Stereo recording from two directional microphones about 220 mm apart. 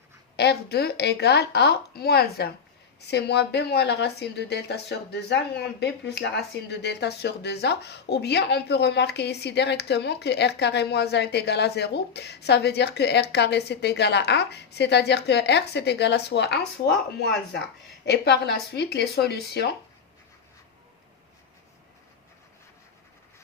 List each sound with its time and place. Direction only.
0.3 s a woman's voice: 45° left (ahead or behind)